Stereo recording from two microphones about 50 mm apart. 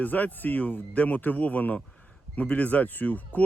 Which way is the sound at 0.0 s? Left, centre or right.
Left.